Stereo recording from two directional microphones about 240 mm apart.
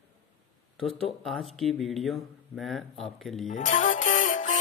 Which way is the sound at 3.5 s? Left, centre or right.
Left.